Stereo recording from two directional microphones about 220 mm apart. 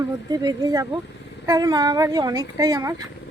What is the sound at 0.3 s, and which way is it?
A woman's voice, 20° right (ahead or behind).